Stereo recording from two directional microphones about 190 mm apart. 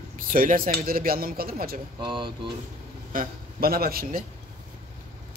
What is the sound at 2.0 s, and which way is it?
Speech, 25° right (ahead or behind).